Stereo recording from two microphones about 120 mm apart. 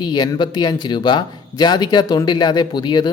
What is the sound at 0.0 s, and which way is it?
Speech, 35° left (ahead or behind).